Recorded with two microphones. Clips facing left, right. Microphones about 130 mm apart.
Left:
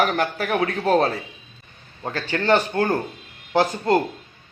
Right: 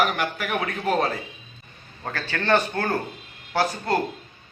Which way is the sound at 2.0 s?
15° left (ahead or behind).